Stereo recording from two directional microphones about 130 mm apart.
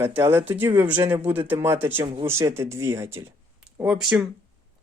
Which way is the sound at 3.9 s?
5° right (ahead or behind).